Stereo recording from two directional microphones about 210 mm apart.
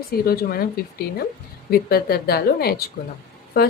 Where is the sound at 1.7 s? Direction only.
45° left (ahead or behind).